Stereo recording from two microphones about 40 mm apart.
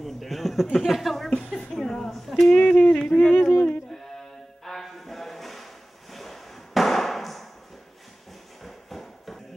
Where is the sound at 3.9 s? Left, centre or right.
Centre.